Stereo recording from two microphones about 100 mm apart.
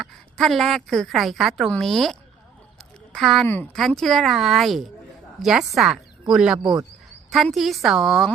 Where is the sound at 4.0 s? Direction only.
Centre (ahead or behind).